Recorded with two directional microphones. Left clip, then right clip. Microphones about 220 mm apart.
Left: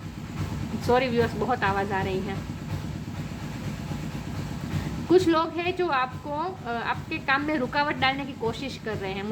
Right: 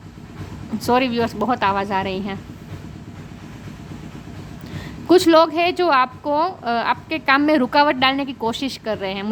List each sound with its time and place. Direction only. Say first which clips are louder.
0.9 s a woman's voice: right 4 dB; 45° right (ahead or behind)
5.0 s a woman's voice: right 9 dB; 50° right (ahead or behind)